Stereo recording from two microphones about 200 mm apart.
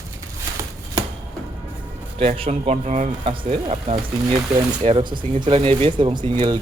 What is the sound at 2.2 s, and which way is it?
Speech, 30° right (ahead or behind).